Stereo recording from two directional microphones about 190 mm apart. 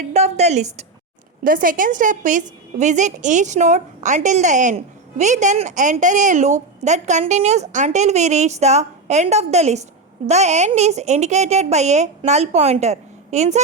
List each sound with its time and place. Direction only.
0.1 s a woman's voice: 35° right (ahead or behind)